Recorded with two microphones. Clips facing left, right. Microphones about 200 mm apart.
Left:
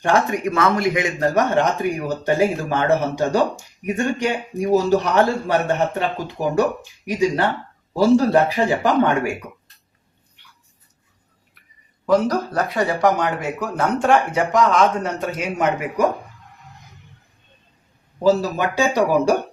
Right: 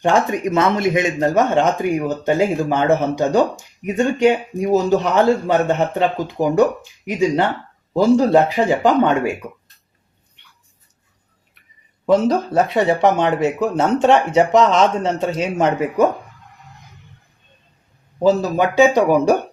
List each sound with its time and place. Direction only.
0.0 s speech: 20° right (ahead or behind)
12.0 s speech: 25° right (ahead or behind)
18.2 s speech: 15° right (ahead or behind)